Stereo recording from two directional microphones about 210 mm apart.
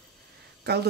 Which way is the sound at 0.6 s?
50° right (ahead or behind).